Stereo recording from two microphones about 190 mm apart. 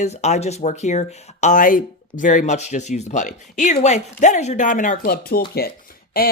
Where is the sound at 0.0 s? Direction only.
35° left (ahead or behind).